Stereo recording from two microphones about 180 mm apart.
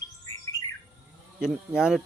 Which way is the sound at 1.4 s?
5° right (ahead or behind).